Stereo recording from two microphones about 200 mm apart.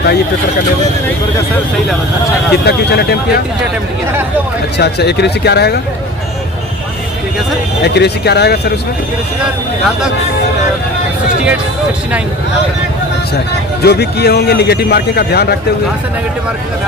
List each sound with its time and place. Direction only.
2.5 s speech: 55° left (ahead or behind)
4.8 s speech: 55° left (ahead or behind)
7.8 s speech: 55° left (ahead or behind)
9.4 s speech: 5° right (ahead or behind)
13.8 s a man's voice: 55° left (ahead or behind)